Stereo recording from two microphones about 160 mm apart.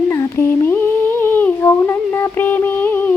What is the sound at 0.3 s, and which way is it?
Humming, 15° left (ahead or behind).